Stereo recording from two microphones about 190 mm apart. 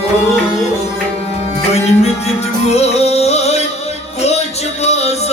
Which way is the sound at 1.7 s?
35° left (ahead or behind).